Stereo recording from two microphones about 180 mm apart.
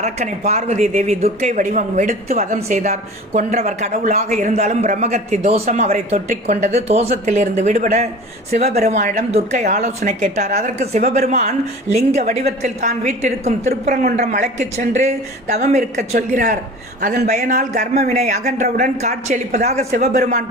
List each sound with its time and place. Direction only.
0.0 s speech: 35° right (ahead or behind)